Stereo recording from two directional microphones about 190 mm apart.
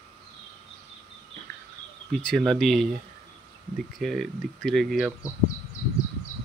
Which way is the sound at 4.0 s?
Centre (ahead or behind).